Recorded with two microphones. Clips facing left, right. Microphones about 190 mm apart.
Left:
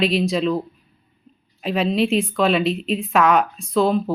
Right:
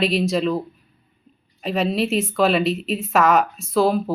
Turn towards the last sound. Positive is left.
turn(degrees=-5)  # may be behind; listen again after turning